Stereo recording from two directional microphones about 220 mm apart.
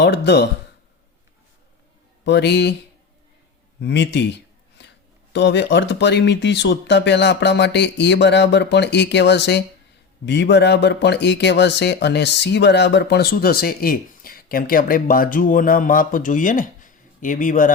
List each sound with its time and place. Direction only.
0.0 s speech: 50° left (ahead or behind)
2.2 s speech: 50° left (ahead or behind)
3.8 s speech: 50° left (ahead or behind)
4.8 s a sound: 50° left (ahead or behind)
5.3 s speech: 50° left (ahead or behind); by 17.7 s 35° left (ahead or behind)